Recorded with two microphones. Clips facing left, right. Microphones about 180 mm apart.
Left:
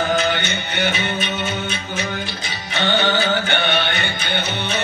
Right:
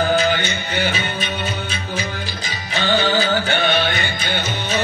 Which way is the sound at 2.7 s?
65° left (ahead or behind).